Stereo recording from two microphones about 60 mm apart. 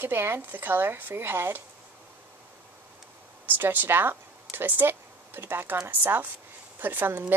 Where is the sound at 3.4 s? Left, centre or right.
Right.